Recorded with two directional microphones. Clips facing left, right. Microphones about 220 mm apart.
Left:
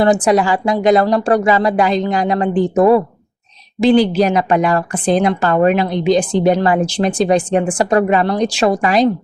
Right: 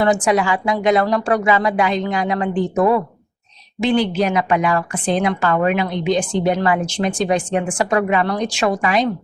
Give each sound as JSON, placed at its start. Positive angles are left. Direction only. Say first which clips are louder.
{"t": 0.0, "sound": "a woman's voice", "louder": "left 4 dB", "side_deg": 35}